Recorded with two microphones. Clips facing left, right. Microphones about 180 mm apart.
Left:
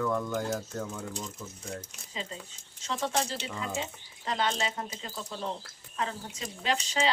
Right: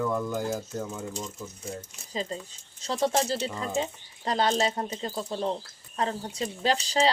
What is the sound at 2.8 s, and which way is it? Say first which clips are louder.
Speech: right 5 dB; 35° right (ahead or behind).